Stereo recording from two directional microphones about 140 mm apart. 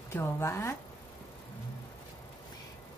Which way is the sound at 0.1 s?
20° left (ahead or behind).